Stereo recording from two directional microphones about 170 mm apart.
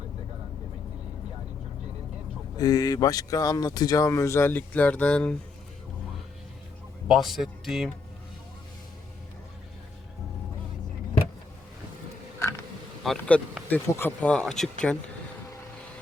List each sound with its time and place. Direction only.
2.6 s speech: 25° left (ahead or behind); by 5.4 s 5° left (ahead or behind)
7.1 s speech: centre (ahead or behind)
13.0 s speech: 5° left (ahead or behind)